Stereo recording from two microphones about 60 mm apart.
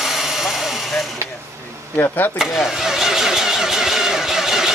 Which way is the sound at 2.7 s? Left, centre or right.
Centre.